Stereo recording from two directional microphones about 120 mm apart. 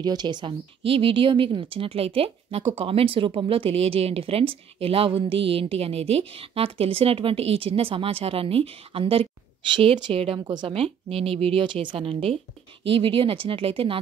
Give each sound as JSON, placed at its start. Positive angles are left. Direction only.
{"t": 0.0, "sound": "speech", "side_deg": -35}
{"t": 10.4, "sound": "speech", "side_deg": -40}
{"t": 10.7, "sound": "speech", "side_deg": -55}